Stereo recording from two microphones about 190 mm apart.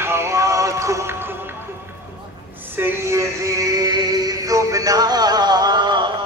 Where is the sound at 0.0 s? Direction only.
15° right (ahead or behind).